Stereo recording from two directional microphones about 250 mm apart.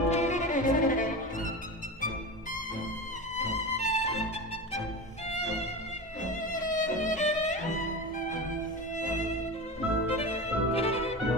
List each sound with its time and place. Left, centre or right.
0.1 s cello: left
3.3 s music: left
6.2 s music: left
10.0 s violin: left